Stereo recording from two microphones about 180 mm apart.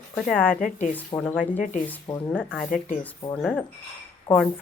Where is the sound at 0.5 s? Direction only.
50° left (ahead or behind).